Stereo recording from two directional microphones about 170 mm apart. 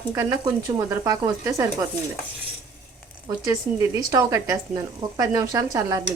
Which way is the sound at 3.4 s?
20° right (ahead or behind).